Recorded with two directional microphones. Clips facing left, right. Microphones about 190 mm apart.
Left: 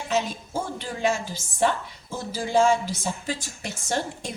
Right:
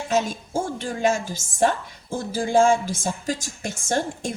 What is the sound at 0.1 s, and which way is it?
Speech, 45° right (ahead or behind).